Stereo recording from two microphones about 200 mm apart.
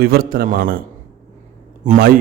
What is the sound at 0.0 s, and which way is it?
A man's voice, 50° right (ahead or behind).